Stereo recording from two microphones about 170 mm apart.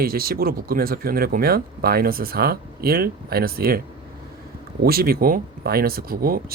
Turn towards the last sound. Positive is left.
turn(degrees=-60)  # may be behind; listen again after turning